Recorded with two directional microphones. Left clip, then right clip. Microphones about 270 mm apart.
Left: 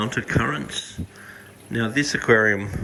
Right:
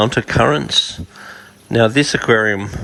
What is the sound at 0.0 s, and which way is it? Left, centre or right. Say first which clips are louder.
Speech: right 10 dB; centre.